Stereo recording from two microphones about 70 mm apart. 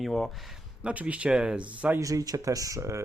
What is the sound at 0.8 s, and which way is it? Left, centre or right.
Speech, centre.